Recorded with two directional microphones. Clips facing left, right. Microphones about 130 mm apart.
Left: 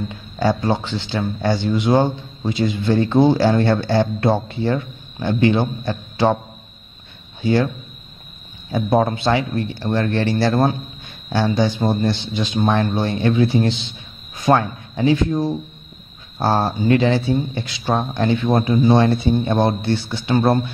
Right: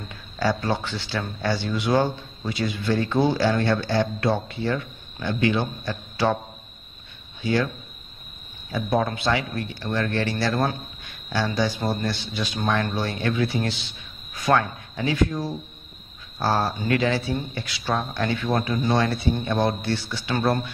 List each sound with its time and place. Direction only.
0.1 s speech: 20° left (ahead or behind)
7.4 s speech: 30° left (ahead or behind)
8.7 s speech: 30° left (ahead or behind)